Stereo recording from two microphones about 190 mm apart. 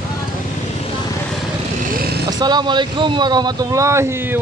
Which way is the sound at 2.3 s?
20° right (ahead or behind).